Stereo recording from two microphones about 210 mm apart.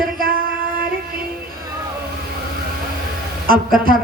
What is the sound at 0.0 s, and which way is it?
Singing, 45° right (ahead or behind).